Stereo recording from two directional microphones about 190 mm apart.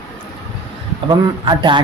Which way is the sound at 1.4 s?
25° right (ahead or behind).